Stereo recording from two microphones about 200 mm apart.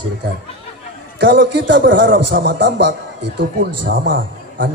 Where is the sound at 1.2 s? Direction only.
60° right (ahead or behind).